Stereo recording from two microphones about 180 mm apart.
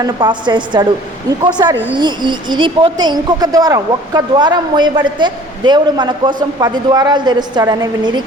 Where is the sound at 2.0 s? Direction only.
25° right (ahead or behind).